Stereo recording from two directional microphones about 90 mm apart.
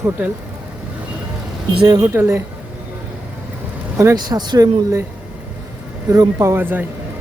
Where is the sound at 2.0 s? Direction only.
30° right (ahead or behind).